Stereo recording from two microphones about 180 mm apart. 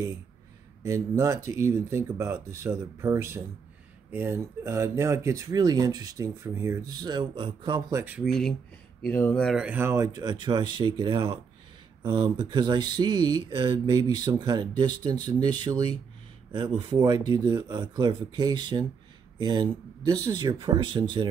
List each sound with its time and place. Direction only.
0.8 s speech: 15° right (ahead or behind)
7.9 s speech: 10° right (ahead or behind)
8.2 s speech: centre (ahead or behind)
9.7 s speech: 15° right (ahead or behind)